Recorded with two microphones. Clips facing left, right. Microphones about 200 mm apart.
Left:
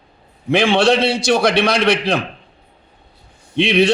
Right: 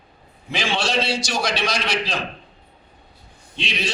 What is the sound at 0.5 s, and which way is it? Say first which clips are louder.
A man's voice: left 10 dB; 60° left (ahead or behind).